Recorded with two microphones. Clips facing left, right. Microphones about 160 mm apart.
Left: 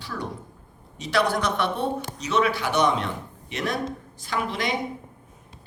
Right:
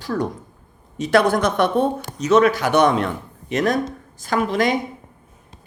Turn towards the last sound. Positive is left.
turn(degrees=-45)  # may be behind; listen again after turning